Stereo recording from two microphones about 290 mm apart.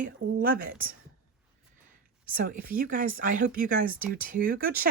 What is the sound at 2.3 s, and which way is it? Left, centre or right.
Speech, right.